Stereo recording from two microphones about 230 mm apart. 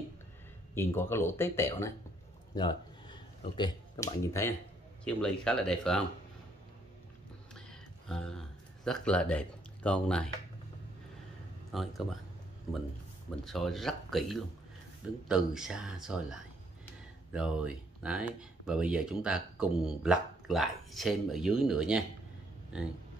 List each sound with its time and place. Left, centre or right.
0.7 s speech: centre
8.1 s speech: centre
11.7 s speech: centre
13.5 s speech: centre